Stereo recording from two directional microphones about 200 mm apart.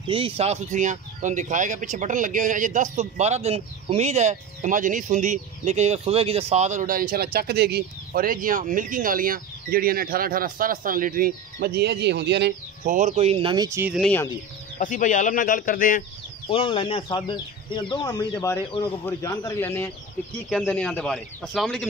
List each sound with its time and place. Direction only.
0.1 s speech: 30° right (ahead or behind)
13.1 s speech: 30° right (ahead or behind)
13.7 s speech: 5° right (ahead or behind)
14.0 s speech: 10° left (ahead or behind)
14.8 s speech: 40° left (ahead or behind)
16.4 s a man's voice: 25° left (ahead or behind); by 21.8 s centre (ahead or behind)